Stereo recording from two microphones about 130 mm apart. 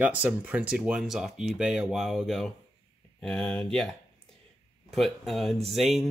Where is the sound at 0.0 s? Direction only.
10° right (ahead or behind).